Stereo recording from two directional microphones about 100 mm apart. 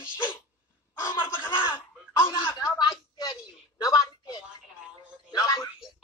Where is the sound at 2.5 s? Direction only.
35° left (ahead or behind).